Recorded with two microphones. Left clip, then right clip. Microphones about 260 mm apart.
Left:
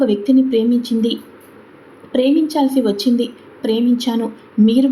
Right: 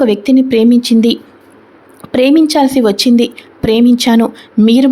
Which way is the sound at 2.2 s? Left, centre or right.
Right.